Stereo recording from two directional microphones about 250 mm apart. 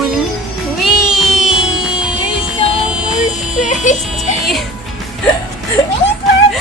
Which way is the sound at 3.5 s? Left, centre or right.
Left.